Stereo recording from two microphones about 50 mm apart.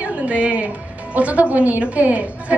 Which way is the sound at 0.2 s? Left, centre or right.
Right.